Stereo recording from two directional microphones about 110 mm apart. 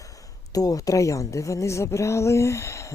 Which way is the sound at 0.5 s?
35° left (ahead or behind).